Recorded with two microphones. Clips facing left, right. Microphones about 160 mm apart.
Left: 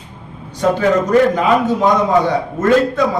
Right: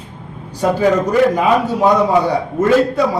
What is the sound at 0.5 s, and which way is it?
A man's voice, 10° right (ahead or behind).